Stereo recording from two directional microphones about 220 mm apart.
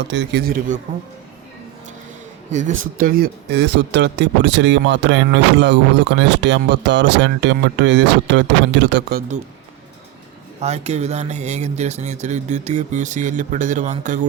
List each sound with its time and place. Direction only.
0.0 s speech: 50° right (ahead or behind)
2.5 s speech: 35° right (ahead or behind)
10.6 s speech: 30° right (ahead or behind)